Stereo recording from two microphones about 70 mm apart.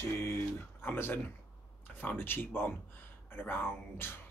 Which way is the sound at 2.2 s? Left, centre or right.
Left.